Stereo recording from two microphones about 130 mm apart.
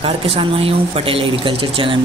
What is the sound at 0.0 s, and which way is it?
Speech, 45° right (ahead or behind).